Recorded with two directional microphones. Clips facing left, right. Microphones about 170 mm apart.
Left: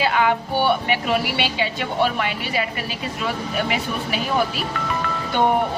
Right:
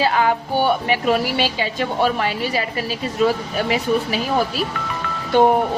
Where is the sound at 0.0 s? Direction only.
40° right (ahead or behind).